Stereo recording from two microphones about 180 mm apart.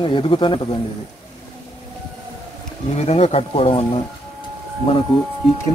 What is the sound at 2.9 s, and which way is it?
Speech, 35° left (ahead or behind).